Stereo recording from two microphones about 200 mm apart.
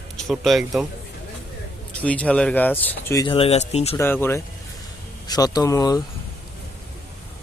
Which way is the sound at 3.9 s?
10° left (ahead or behind).